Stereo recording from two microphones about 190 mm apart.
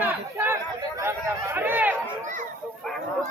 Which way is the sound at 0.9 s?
15° right (ahead or behind).